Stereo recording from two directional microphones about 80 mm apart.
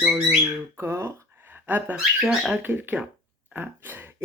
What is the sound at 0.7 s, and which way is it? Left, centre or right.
Speech, right.